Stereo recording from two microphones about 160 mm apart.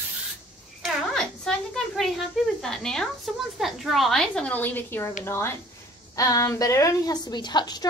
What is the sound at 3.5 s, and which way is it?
A woman's voice, centre (ahead or behind).